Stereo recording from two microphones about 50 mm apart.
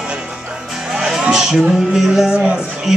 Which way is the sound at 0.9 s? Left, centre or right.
Centre.